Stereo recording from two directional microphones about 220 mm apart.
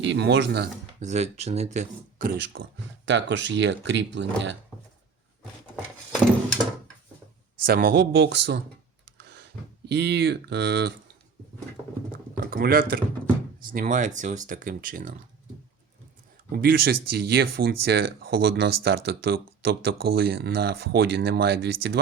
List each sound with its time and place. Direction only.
0.0 s speech: 55° right (ahead or behind)
0.9 s speech: 30° right (ahead or behind); by 4.5 s 55° right (ahead or behind)
7.7 s speech: 45° right (ahead or behind)
12.4 s speech: 45° right (ahead or behind)
16.5 s speech: 40° right (ahead or behind)